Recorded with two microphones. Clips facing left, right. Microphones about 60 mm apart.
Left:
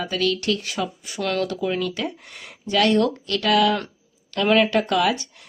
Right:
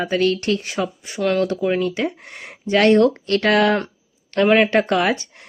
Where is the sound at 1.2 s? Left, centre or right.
Centre.